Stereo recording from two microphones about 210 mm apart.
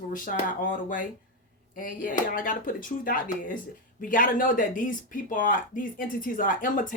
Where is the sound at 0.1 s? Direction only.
40° left (ahead or behind).